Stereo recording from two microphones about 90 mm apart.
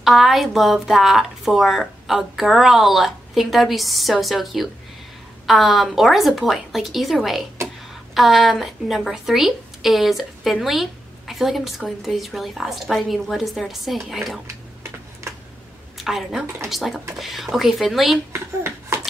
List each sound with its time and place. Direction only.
0.0 s a woman's voice: centre (ahead or behind)
14.5 s typewriter: 30° right (ahead or behind)
16.0 s a woman's voice: centre (ahead or behind)
18.3 s a child's voice: 30° right (ahead or behind)